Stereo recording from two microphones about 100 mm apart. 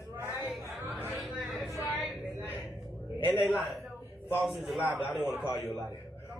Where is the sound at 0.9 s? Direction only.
25° right (ahead or behind).